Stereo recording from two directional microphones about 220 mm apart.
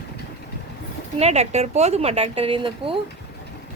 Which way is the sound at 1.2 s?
30° right (ahead or behind).